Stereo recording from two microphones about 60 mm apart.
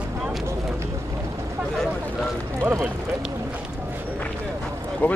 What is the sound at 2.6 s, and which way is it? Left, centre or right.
Run, right.